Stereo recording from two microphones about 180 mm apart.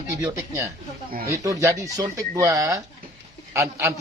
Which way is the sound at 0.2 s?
15° right (ahead or behind).